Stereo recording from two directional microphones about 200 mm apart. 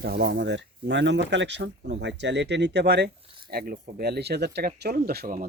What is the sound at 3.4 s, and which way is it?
Speech, 50° right (ahead or behind).